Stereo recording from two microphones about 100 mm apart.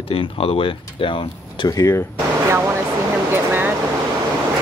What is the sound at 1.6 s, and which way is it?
Speech, 30° left (ahead or behind).